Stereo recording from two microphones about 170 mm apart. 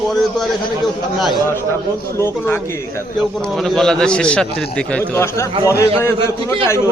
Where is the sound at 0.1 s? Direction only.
Centre (ahead or behind).